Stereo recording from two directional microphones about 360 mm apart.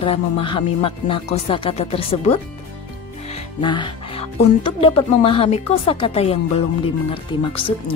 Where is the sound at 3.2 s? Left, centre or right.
Centre.